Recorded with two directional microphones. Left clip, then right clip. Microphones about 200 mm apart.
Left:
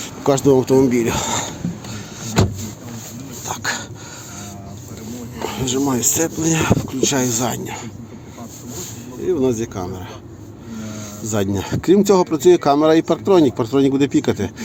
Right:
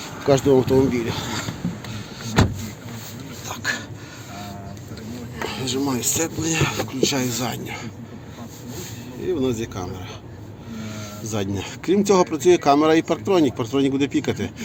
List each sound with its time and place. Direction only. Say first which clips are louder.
0.3 s speech: left 2 dB; 45° left (ahead or behind)
1.9 s vehicle: left 3 dB; 40° left (ahead or behind)
3.5 s filing: left 3 dB; 45° left (ahead or behind)
5.4 s speech: left 4 dB; 25° left (ahead or behind)
9.3 s speech: left 5 dB; 20° left (ahead or behind)
11.3 s speech: left 6 dB; 30° left (ahead or behind)